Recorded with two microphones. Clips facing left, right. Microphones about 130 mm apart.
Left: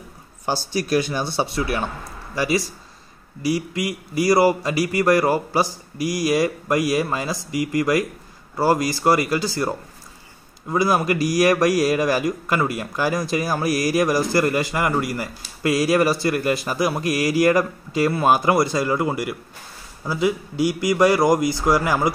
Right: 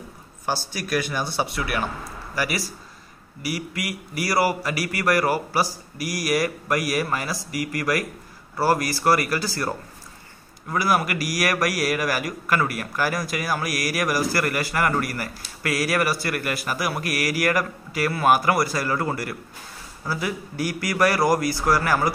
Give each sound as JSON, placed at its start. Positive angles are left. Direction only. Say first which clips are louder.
{"t": 0.5, "sound": "a man's voice", "louder": "left 5 dB", "side_deg": 25}